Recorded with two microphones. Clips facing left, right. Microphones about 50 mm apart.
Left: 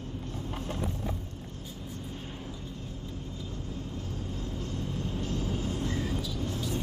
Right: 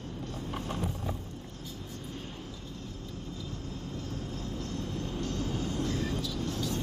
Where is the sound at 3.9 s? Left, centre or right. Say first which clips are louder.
Even; centre.